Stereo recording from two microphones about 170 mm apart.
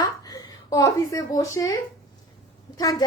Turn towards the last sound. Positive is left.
turn(degrees=20)  # may be behind; listen again after turning